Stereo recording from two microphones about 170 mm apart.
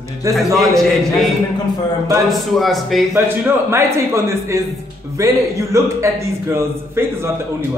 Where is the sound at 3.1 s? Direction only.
15° right (ahead or behind).